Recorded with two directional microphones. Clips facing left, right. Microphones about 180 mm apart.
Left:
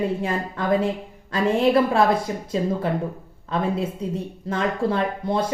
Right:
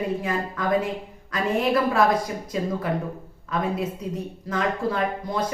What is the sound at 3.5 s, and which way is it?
Speech, 30° left (ahead or behind).